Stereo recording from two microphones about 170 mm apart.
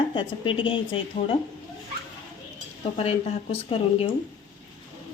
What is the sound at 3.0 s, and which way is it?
A woman's voice, 35° left (ahead or behind).